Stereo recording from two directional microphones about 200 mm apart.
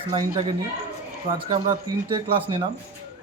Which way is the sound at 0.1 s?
25° right (ahead or behind).